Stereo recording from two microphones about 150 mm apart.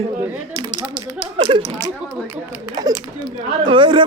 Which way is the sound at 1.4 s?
35° right (ahead or behind).